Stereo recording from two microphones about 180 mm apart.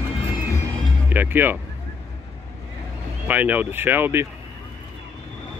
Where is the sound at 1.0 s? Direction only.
10° right (ahead or behind).